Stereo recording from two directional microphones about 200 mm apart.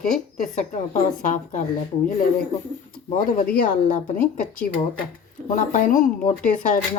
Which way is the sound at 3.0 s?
35° left (ahead or behind).